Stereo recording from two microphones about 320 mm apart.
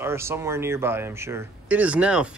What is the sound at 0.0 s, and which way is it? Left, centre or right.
Speech, centre.